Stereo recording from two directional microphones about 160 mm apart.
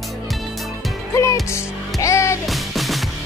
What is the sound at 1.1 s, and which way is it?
Music, 20° left (ahead or behind).